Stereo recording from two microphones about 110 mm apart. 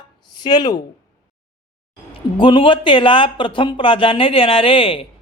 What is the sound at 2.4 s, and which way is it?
Speech, 50° left (ahead or behind).